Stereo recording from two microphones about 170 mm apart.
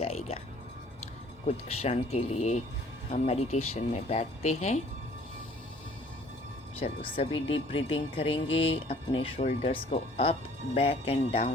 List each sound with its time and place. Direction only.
0.0 s music: 35° left (ahead or behind)
1.5 s speech: 40° left (ahead or behind)
6.7 s speech: 35° left (ahead or behind)